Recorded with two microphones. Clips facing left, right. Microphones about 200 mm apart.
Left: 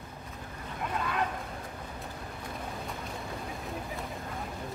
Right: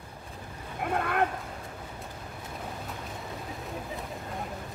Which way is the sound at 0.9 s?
60° right (ahead or behind).